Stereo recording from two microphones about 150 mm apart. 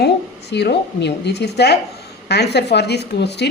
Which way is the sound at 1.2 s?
90° left.